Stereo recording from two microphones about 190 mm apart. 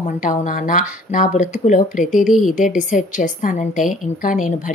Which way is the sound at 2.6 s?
45° left (ahead or behind).